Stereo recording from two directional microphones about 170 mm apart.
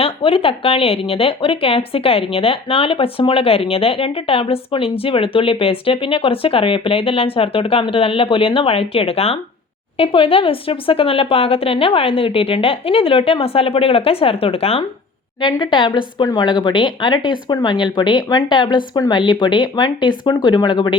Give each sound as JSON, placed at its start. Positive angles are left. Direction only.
{"t": 0.0, "sound": "a woman's voice", "side_deg": 30}